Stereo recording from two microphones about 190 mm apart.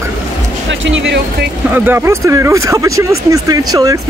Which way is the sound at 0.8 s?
70° right (ahead or behind).